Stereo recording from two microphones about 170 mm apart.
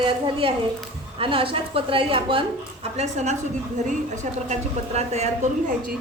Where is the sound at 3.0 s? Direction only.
45° right (ahead or behind).